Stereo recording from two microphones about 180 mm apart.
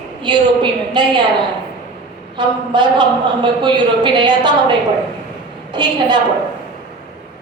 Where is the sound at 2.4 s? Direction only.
25° right (ahead or behind).